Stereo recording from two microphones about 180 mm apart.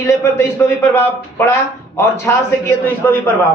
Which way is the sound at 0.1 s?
15° left (ahead or behind).